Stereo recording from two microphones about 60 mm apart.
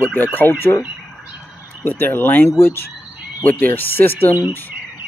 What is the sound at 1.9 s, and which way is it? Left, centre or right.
Speech, left.